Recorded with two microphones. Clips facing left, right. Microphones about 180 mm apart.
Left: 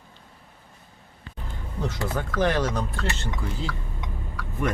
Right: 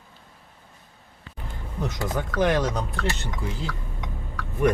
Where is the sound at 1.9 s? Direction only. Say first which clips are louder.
Right 2 dB; 15° right (ahead or behind).